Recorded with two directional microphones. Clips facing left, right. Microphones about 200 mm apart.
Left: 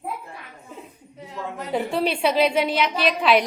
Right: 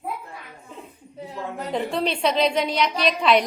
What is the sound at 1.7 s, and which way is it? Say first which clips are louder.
A woman's voice: left 2 dB; 5° left (ahead or behind).